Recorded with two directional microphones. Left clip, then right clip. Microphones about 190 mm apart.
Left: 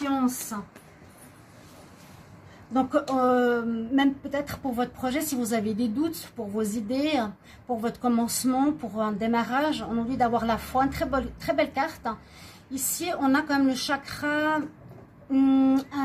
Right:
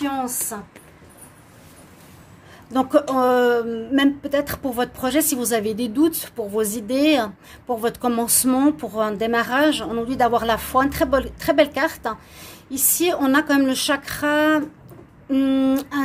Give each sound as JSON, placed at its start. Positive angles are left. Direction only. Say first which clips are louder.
{"t": 0.1, "sound": "speech", "louder": "right 2 dB", "side_deg": -55}
{"t": 2.7, "sound": "a woman's voice", "louder": "right 6 dB", "side_deg": -60}